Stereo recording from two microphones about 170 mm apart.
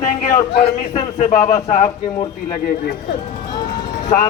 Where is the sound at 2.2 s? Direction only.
20° left (ahead or behind).